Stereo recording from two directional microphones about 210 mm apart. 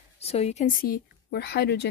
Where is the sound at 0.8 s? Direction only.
50° left (ahead or behind).